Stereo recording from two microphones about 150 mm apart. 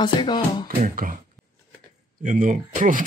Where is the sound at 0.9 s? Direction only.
70° right (ahead or behind).